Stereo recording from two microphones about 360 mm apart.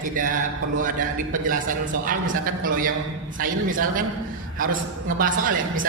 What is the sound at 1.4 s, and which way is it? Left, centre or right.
Speech, right.